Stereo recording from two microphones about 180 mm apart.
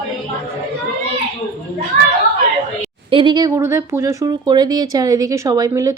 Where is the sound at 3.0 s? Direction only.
30° right (ahead or behind).